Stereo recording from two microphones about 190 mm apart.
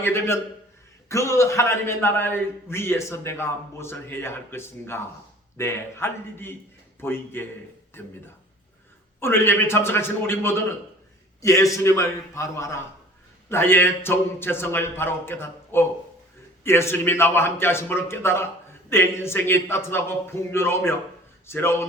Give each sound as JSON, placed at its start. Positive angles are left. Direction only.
{"t": 0.0, "sound": "a man's voice", "side_deg": 15}
{"t": 9.2, "sound": "a man's voice", "side_deg": 10}